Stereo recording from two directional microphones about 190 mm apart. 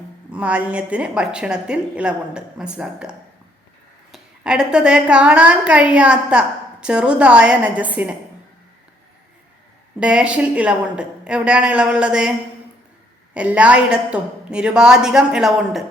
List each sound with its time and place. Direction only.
0.3 s a woman's voice: 10° right (ahead or behind)
10.0 s a woman's voice: 5° right (ahead or behind)
13.3 s a woman's voice: 5° right (ahead or behind)